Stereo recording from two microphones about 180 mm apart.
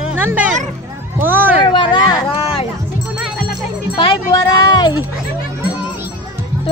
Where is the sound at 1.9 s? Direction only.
25° left (ahead or behind).